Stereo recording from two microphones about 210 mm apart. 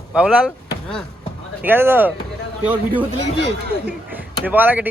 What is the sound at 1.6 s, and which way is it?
Speech, 10° right (ahead or behind).